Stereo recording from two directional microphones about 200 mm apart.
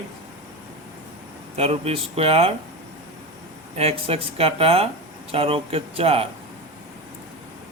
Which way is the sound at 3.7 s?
30° right (ahead or behind).